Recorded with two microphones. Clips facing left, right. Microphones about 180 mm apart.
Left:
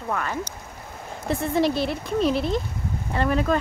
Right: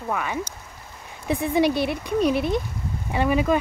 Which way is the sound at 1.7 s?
60° right (ahead or behind).